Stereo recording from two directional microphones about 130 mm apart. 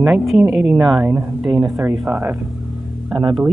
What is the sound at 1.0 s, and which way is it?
Speech, 15° right (ahead or behind).